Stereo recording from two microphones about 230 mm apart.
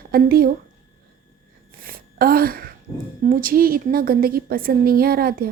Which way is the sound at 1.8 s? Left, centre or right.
Right.